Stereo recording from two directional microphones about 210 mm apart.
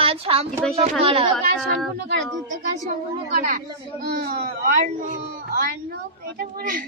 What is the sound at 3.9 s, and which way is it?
Speech, 45° right (ahead or behind).